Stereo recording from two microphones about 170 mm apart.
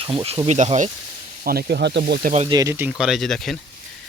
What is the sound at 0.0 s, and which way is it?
Speech, 30° right (ahead or behind).